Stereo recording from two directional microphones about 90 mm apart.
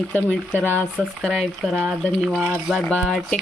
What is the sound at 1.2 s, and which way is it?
Speech, centre (ahead or behind).